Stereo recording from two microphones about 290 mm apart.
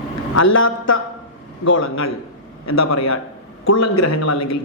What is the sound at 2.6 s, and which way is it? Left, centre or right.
A man's voice, left.